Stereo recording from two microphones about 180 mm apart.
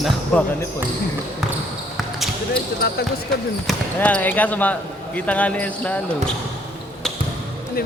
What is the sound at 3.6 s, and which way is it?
Speech, 5° left (ahead or behind).